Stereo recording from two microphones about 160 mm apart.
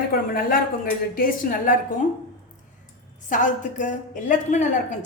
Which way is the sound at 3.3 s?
50° left (ahead or behind).